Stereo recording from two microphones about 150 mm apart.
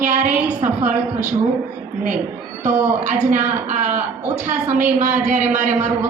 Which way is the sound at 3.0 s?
55° right (ahead or behind).